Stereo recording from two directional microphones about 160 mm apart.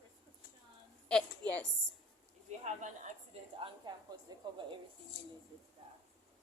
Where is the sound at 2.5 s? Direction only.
45° right (ahead or behind); by 4.8 s 30° right (ahead or behind).